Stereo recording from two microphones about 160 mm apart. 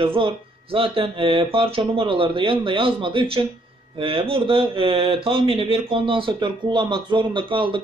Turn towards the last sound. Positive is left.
turn(degrees=-30)  # may be behind; listen again after turning